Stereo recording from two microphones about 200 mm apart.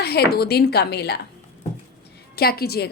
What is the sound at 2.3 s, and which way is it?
Speech, 50° left (ahead or behind).